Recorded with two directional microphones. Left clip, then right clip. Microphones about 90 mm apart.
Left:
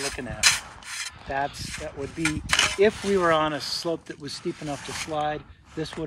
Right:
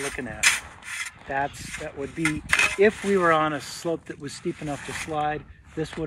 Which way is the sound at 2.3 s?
50° left (ahead or behind).